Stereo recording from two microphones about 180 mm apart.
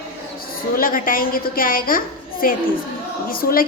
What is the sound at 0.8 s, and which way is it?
A woman's voice, 50° left (ahead or behind).